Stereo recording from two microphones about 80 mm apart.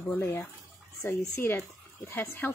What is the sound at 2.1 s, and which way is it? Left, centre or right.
Speech, left.